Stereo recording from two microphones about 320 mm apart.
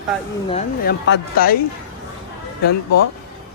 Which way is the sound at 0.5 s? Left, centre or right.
Left.